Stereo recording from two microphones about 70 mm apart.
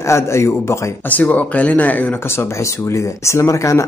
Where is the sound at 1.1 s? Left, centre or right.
Left.